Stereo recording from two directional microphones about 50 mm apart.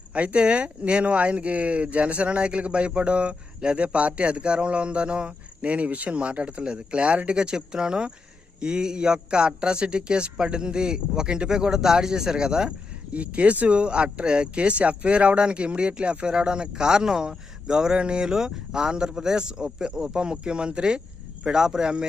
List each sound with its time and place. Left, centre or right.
0.1 s a man's voice: right
13.1 s a man's voice: right